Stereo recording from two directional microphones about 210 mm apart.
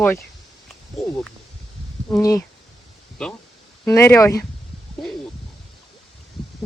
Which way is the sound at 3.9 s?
15° left (ahead or behind).